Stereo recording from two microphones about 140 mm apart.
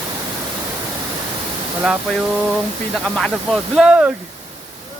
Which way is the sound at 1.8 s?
5° right (ahead or behind).